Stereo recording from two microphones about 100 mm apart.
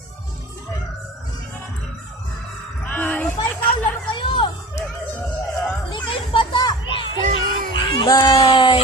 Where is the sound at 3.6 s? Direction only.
20° left (ahead or behind).